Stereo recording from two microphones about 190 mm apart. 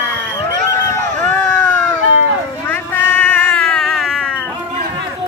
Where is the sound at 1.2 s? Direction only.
5° left (ahead or behind).